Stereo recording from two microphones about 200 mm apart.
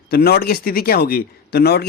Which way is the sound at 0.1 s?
50° left (ahead or behind).